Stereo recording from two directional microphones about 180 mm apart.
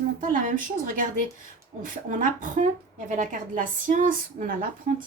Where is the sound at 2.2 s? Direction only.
45° right (ahead or behind).